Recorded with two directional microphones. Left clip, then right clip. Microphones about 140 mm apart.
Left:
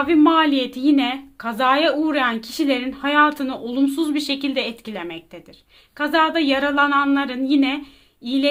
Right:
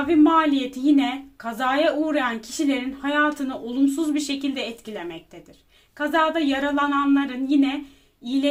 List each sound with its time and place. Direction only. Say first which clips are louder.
0.1 s speech: left 1 dB; 40° left (ahead or behind)